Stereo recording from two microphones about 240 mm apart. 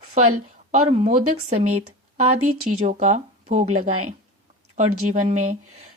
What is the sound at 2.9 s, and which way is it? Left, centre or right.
Speech, right.